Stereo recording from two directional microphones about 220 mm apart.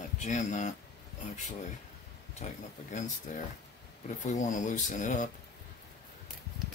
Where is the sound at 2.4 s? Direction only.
30° left (ahead or behind).